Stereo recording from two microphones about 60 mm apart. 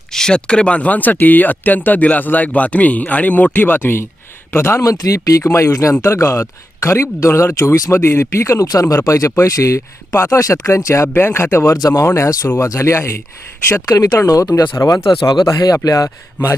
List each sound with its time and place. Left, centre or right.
0.1 s speech: centre; by 4.8 s left
4.8 s speech: left
5.4 s speech: left
8.6 s speech: left
9.0 s speech: left
11.2 s speech: left
11.7 s speech: left
12.0 s speech: left
13.8 s speech: left
15.5 s speech: left